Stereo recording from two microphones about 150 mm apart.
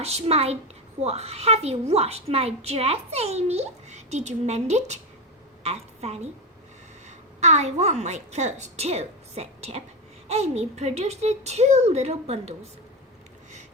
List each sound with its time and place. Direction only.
0.0 s a woman's voice: 45° right (ahead or behind)
7.4 s a woman's voice: 50° right (ahead or behind)